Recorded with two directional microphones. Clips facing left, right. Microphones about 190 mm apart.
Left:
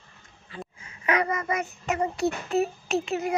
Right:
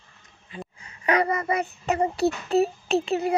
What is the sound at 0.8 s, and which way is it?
Child singing, 35° right (ahead or behind).